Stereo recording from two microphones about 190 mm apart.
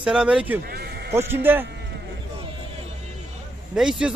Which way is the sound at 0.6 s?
55° right (ahead or behind).